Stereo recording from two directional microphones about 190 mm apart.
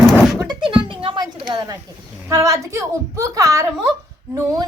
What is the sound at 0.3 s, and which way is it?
Thunk, 25° right (ahead or behind).